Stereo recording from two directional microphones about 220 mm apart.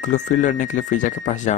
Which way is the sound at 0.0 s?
35° left (ahead or behind).